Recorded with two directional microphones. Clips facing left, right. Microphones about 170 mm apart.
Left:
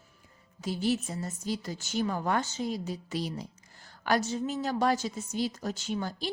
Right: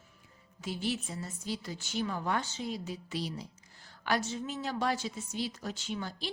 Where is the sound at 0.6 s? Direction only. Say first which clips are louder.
Left 5 dB; 40° left (ahead or behind).